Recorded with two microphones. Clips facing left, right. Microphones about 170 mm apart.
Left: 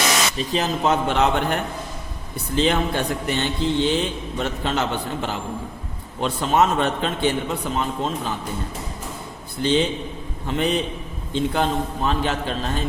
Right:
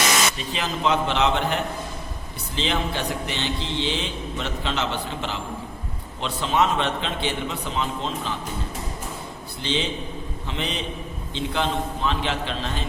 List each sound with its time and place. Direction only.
0.3 s a man's voice: 40° left (ahead or behind)
2.6 s a man's voice: 50° left (ahead or behind)
9.6 s a man's voice: 50° left (ahead or behind)